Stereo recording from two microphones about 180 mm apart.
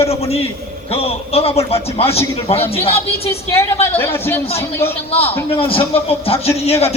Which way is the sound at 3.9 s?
15° left (ahead or behind).